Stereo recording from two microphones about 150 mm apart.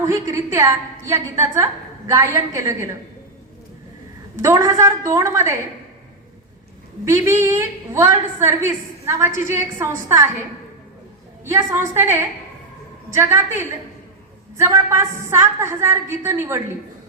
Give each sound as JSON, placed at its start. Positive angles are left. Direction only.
{"t": 0.0, "sound": "a woman's voice", "side_deg": -20}
{"t": 4.4, "sound": "a woman's voice", "side_deg": -20}
{"t": 7.0, "sound": "a woman's voice", "side_deg": -20}
{"t": 11.5, "sound": "a woman's voice", "side_deg": -20}
{"t": 13.1, "sound": "a woman's voice", "side_deg": -20}
{"t": 14.6, "sound": "a woman's voice", "side_deg": -15}